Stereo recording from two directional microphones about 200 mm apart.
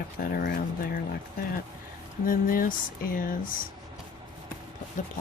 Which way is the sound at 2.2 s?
45° left (ahead or behind).